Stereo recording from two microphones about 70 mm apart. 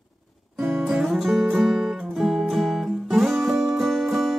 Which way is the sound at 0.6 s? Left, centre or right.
Centre.